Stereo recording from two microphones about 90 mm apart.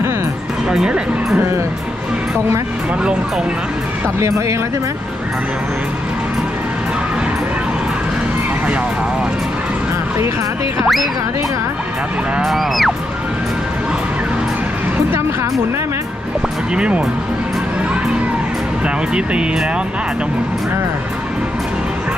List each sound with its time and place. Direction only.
0.7 s speech: 10° right (ahead or behind)
3.0 s speech: 10° right (ahead or behind)
4.0 s speech: 35° right (ahead or behind)
10.8 s music: centre (ahead or behind)
12.4 s music: centre (ahead or behind)
16.7 s speech: 10° right (ahead or behind)
19.1 s speech: 10° right (ahead or behind)